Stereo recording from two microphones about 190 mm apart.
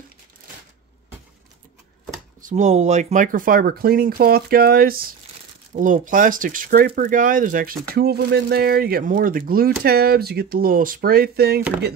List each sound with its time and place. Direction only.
2.4 s speech: 40° right (ahead or behind); by 11.6 s 55° right (ahead or behind)